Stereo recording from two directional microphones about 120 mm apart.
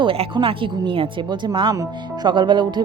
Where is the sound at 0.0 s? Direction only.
50° right (ahead or behind).